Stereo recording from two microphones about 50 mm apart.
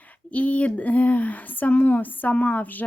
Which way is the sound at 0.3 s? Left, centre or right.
Left.